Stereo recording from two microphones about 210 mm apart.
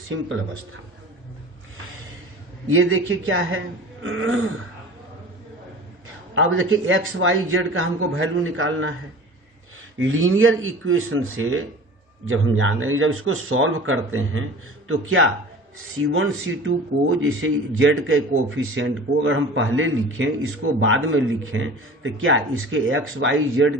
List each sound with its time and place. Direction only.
0.1 s a man's voice: 70° right (ahead or behind)
2.6 s a man's voice: 75° right (ahead or behind)
6.3 s a man's voice: 70° right (ahead or behind)
10.1 s a man's voice: 75° right (ahead or behind)